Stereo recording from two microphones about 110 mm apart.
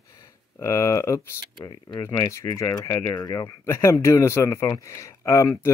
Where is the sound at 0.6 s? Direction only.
30° left (ahead or behind).